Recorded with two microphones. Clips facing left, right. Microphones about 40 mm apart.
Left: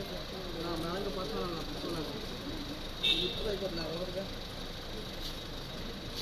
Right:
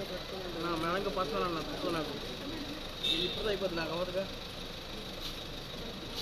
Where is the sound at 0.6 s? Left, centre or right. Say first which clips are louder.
Right 4 dB; right.